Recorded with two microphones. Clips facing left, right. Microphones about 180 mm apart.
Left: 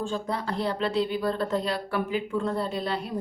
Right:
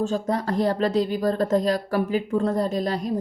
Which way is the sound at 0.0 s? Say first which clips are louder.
Right 6 dB; 45° right (ahead or behind).